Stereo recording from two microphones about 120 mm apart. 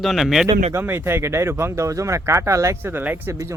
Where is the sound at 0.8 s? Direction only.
20° right (ahead or behind).